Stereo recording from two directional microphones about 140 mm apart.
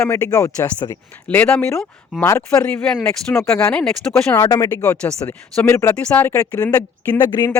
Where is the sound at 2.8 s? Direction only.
10° left (ahead or behind).